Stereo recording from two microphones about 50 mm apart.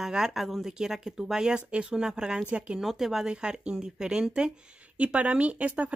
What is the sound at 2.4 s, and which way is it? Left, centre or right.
Speech, right.